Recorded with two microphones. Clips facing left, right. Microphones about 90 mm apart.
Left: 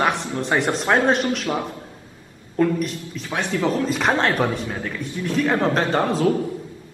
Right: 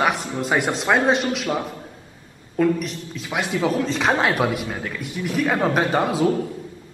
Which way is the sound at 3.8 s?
Centre (ahead or behind).